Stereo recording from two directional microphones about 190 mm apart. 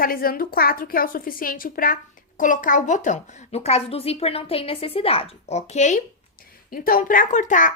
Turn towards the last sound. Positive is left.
turn(degrees=40)  # may be behind; listen again after turning